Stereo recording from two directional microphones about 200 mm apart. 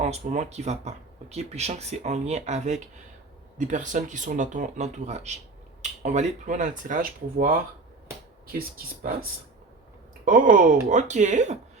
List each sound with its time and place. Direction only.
0.0 s speech: 35° right (ahead or behind)
10.2 s speech: 40° right (ahead or behind)